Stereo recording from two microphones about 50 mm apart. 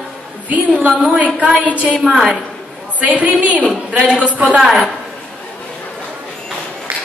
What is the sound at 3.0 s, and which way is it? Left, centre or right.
A woman's voice, right.